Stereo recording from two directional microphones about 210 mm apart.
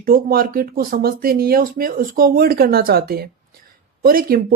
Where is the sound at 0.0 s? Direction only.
45° right (ahead or behind).